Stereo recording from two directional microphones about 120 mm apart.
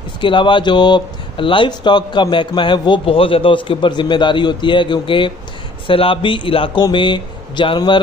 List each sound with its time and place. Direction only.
0.2 s a man's voice: 45° left (ahead or behind)